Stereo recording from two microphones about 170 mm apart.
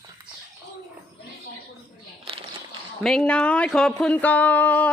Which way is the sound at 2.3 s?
35° right (ahead or behind).